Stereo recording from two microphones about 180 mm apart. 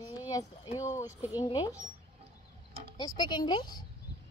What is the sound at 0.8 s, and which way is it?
Speech, 15° left (ahead or behind).